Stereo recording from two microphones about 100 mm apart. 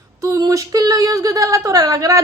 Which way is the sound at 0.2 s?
35° right (ahead or behind).